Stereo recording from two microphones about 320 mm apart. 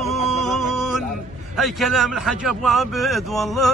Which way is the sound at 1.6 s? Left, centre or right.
Centre.